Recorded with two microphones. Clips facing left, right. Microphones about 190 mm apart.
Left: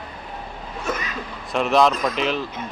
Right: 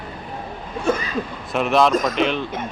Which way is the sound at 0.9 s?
30° right (ahead or behind).